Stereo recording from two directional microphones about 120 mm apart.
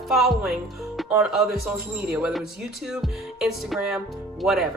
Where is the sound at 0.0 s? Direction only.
Centre (ahead or behind).